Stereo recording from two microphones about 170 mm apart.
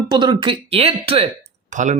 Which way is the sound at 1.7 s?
45° right (ahead or behind).